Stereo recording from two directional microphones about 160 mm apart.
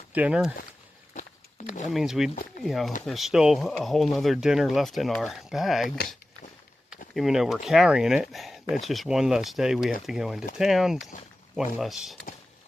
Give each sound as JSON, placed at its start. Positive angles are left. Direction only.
{"t": 0.1, "sound": "speech", "side_deg": -10}
{"t": 1.1, "sound": "a sound", "side_deg": 50}
{"t": 1.9, "sound": "speech", "side_deg": -5}
{"t": 2.3, "sound": "speech", "side_deg": 60}
{"t": 2.6, "sound": "speech", "side_deg": 0}
{"t": 7.1, "sound": "speech", "side_deg": 0}